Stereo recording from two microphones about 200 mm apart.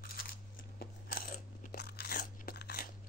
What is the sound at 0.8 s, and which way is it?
Crunch, 45° left (ahead or behind).